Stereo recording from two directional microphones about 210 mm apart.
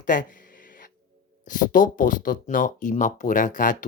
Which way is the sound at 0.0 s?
40° left (ahead or behind).